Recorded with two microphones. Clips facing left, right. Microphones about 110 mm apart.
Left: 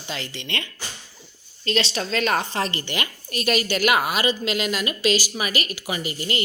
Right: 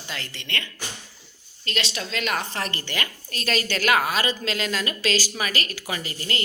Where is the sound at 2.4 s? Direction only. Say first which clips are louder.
Left 4 dB; 25° left (ahead or behind).